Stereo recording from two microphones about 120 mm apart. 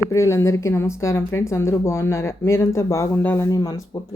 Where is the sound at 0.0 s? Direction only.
25° left (ahead or behind).